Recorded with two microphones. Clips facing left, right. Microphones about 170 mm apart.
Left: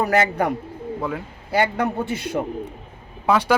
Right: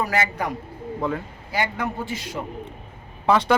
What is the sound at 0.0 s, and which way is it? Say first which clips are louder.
Speech: left 5 dB; 55° left (ahead or behind).